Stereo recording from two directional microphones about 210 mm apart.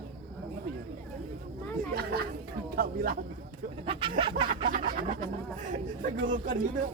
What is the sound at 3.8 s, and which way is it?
Speech, 25° right (ahead or behind).